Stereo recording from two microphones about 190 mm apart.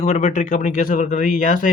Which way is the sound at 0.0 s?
40° left (ahead or behind).